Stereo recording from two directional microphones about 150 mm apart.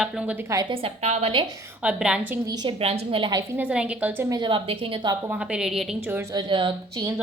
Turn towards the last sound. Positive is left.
turn(degrees=-30)  # may be behind; listen again after turning